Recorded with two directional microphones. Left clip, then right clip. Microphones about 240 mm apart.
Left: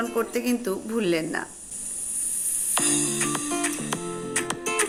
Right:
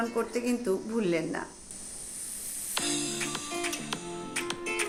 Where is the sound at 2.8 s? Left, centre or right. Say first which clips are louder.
Left 5 dB; left.